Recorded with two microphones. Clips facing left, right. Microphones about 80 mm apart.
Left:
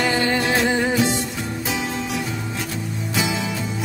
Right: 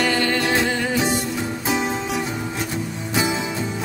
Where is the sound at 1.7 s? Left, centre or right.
Right.